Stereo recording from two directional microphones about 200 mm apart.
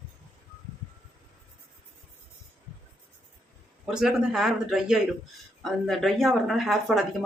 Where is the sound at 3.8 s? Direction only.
Centre (ahead or behind).